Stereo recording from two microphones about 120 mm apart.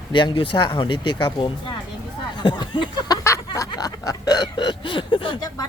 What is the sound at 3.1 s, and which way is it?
Hiccup, 25° left (ahead or behind).